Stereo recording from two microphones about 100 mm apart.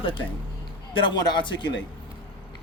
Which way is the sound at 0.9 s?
50° left (ahead or behind).